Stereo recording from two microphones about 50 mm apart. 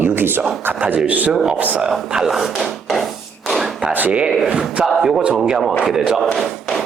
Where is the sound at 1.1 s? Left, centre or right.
Right.